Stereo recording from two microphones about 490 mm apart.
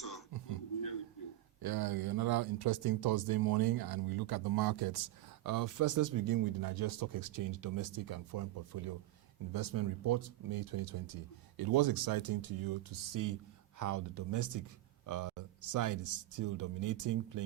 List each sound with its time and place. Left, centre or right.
1.6 s speech: right